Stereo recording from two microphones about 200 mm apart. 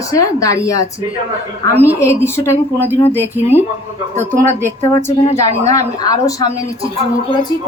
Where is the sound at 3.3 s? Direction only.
10° right (ahead or behind).